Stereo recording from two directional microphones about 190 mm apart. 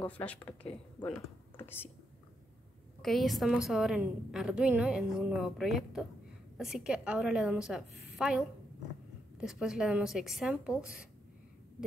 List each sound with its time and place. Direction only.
0.0 s a woman's voice: 5° left (ahead or behind)
1.6 s a woman's voice: 10° left (ahead or behind)
3.0 s a woman's voice: centre (ahead or behind)